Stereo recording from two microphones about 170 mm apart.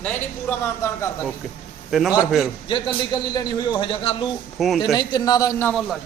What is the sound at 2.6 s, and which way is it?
A man's voice, 30° left (ahead or behind).